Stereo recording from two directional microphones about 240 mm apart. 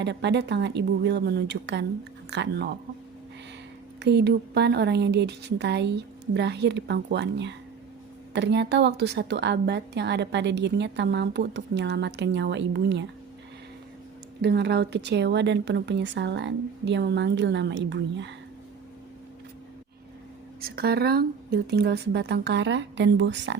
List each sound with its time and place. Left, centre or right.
0.0 s a woman's voice: right
4.0 s a woman's voice: right
14.4 s a woman's voice: right
20.6 s a woman's voice: right